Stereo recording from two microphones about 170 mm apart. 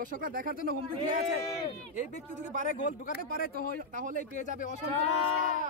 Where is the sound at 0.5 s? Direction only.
60° left (ahead or behind).